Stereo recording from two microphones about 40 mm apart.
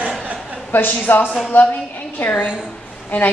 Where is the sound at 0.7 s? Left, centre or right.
Left.